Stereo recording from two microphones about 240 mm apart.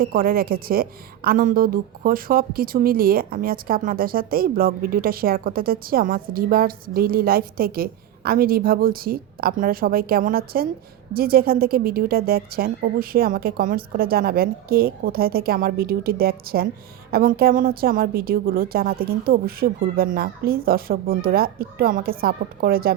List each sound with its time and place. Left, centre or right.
0.0 s a woman's voice: right